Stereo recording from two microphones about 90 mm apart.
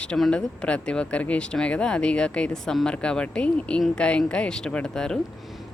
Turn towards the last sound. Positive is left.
turn(degrees=5)  # may be behind; listen again after turning